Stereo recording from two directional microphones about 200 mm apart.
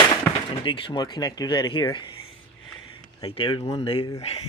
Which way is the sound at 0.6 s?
25° left (ahead or behind).